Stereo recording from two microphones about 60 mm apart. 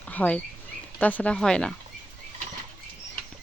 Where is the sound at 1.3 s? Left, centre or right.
Centre.